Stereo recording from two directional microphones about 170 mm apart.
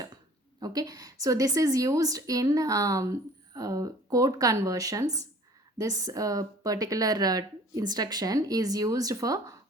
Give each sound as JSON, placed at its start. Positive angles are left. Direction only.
{"t": 0.6, "sound": "a woman's voice", "side_deg": -20}